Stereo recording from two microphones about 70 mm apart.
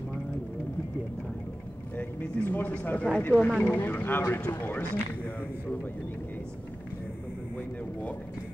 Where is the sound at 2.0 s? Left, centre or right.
Left.